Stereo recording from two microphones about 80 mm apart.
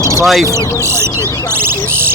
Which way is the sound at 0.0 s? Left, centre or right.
Right.